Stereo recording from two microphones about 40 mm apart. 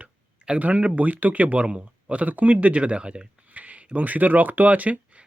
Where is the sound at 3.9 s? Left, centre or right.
Right.